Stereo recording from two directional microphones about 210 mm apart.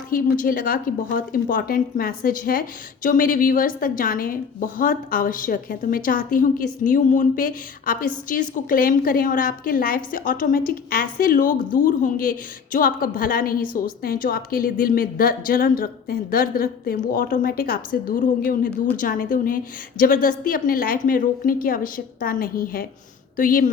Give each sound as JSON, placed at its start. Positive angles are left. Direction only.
{"t": 0.1, "sound": "a woman's voice", "side_deg": 45}